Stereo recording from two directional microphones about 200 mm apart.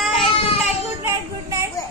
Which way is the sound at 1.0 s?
15° right (ahead or behind).